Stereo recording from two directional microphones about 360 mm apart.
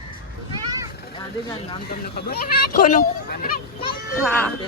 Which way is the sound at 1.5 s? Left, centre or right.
Centre.